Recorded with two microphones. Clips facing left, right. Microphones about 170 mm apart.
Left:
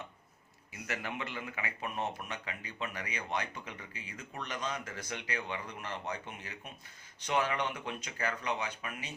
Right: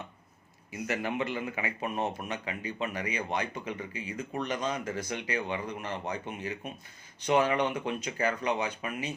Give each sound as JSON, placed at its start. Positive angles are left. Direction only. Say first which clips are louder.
{"t": 0.9, "sound": "speech", "louder": "right 8 dB", "side_deg": -20}